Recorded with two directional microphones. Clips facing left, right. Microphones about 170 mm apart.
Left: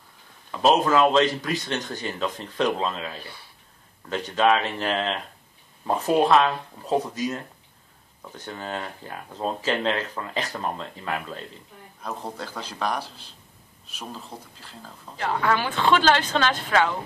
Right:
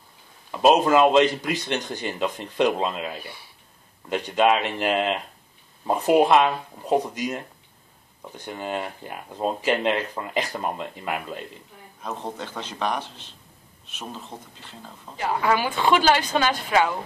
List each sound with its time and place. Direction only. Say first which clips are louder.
0.5 s speech: right 2 dB; 15° right (ahead or behind)
12.2 s a man's voice: right 1 dB; 5° left (ahead or behind)
15.1 s speech: right 1 dB; 10° right (ahead or behind)